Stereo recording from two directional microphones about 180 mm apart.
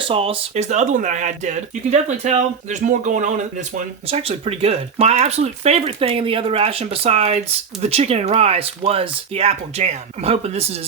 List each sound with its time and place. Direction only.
0.1 s speech: 30° right (ahead or behind)